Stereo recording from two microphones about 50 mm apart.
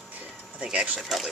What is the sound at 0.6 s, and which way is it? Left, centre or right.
Speech, centre.